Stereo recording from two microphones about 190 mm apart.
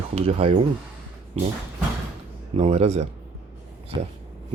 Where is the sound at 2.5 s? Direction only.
35° right (ahead or behind).